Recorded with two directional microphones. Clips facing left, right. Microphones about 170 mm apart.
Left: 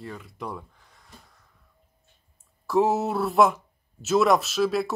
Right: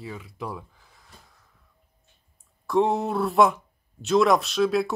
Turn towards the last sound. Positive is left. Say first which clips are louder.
# right 2 dB
turn(degrees=0)  # may be behind; listen again after turning